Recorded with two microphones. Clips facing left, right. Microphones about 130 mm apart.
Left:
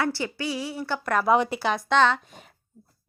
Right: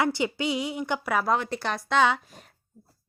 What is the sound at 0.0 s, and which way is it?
A woman's voice, 20° right (ahead or behind).